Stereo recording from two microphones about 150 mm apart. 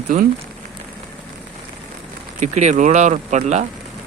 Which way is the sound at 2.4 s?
50° right (ahead or behind).